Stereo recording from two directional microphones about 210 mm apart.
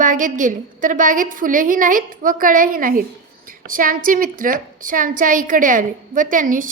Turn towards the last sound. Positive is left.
turn(degrees=-40)  # may be behind; listen again after turning